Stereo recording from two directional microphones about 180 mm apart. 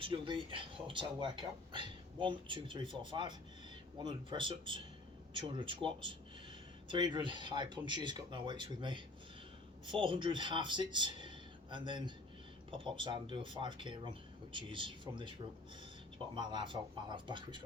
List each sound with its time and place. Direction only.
0.0 s speech: 30° right (ahead or behind)